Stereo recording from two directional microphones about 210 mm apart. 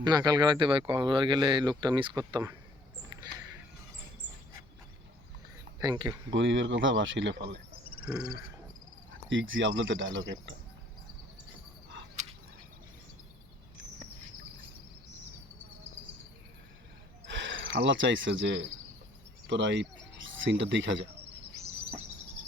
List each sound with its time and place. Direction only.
0.0 s speech: 20° right (ahead or behind)
5.8 s speech: 20° right (ahead or behind)
6.3 s speech: 60° right (ahead or behind)
9.3 s speech: 65° right (ahead or behind)
17.2 s speech: 60° right (ahead or behind)